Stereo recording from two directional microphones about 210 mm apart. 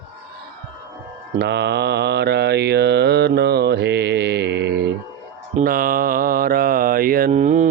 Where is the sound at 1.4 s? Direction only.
55° right (ahead or behind).